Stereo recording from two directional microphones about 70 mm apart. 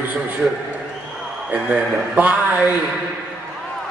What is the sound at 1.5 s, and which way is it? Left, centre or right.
A man's voice, right.